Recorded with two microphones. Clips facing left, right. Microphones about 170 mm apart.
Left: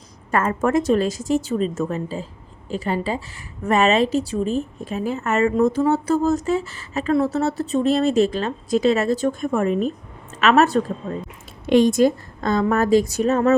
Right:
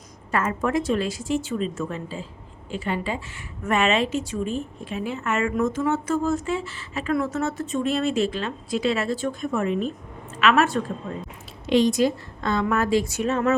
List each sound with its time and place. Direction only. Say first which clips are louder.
0.3 s a woman's voice: left 4 dB; 50° left (ahead or behind)
11.6 s a woman's voice: left 4 dB; 50° left (ahead or behind)